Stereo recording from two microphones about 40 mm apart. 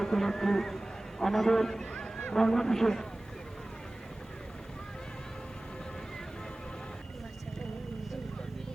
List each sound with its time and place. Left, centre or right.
0.0 s a man's voice: centre
1.8 s a sound: left
2.3 s a man's voice: centre